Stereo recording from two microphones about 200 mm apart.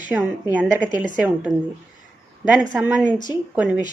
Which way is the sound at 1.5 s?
20° right (ahead or behind).